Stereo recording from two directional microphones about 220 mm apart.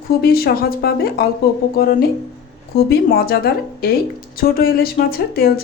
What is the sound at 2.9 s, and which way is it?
Speech, 45° left (ahead or behind).